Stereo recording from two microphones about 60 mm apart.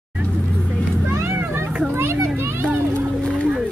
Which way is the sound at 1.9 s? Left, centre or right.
Right.